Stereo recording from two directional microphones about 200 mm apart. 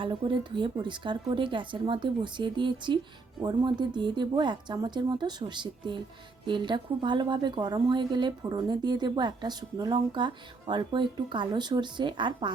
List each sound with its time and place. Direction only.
0.0 s a woman's voice: 25° right (ahead or behind)